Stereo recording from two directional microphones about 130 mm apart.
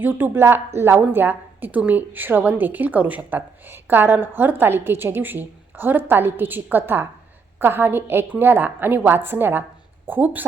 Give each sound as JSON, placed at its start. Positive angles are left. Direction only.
{"t": 0.0, "sound": "a woman's voice", "side_deg": -15}